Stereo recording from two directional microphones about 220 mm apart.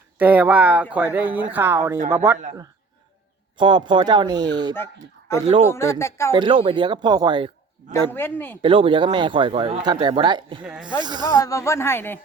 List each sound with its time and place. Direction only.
0.2 s speech: 5° right (ahead or behind)
3.6 s speech: 20° right (ahead or behind)
5.6 s speech: 10° left (ahead or behind)
6.3 s speech: 20° right (ahead or behind)
8.1 s speech: 10° left (ahead or behind)
8.6 s speech: 25° right (ahead or behind)
10.6 s speech: 5° right (ahead or behind)
10.8 s speech: 20° right (ahead or behind)
11.2 s speech: 15° left (ahead or behind)